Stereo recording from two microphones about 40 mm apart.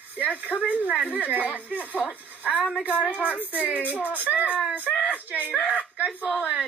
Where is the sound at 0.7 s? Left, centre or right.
Right.